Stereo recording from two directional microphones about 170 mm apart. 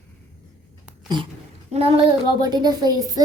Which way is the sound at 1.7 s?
40° right (ahead or behind).